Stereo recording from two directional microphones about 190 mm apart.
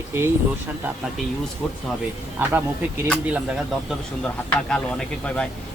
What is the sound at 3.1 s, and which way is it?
Speech, centre (ahead or behind).